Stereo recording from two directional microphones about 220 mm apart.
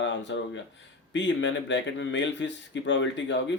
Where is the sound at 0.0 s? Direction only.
55° left (ahead or behind).